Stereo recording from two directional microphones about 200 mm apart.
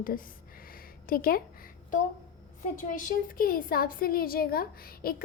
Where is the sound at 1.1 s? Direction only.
45° left (ahead or behind).